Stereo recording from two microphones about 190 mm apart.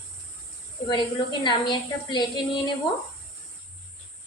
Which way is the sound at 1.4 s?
25° left (ahead or behind).